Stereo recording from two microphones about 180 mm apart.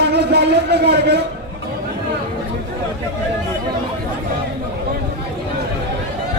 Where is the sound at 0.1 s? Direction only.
65° right (ahead or behind).